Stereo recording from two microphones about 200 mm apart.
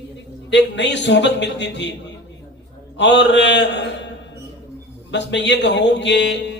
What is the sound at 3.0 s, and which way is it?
Speech, 60° left (ahead or behind).